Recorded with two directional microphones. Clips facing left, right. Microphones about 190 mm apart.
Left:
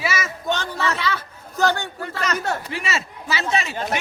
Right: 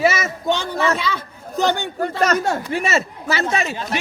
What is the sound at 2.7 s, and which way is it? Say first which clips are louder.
Speech: right 7 dB; 50° right (ahead or behind).